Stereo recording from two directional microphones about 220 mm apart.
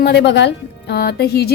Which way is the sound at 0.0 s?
50° left (ahead or behind).